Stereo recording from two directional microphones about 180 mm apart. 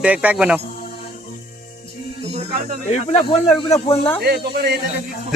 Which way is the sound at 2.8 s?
40° left (ahead or behind).